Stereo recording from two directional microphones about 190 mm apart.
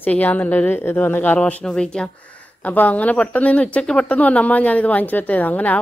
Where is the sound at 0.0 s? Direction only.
10° left (ahead or behind).